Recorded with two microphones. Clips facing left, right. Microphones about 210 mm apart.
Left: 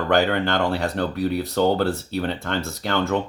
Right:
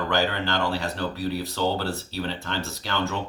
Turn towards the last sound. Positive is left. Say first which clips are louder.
# left 5 dB
turn(degrees=55)  # may be behind; listen again after turning